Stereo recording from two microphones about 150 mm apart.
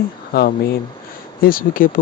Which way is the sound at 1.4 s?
75° left (ahead or behind).